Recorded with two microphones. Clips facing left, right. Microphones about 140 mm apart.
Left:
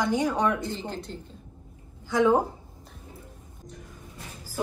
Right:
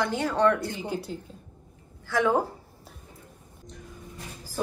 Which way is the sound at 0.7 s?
10° right (ahead or behind).